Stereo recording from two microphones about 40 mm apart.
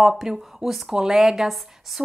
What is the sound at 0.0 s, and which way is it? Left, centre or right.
A woman's voice, centre.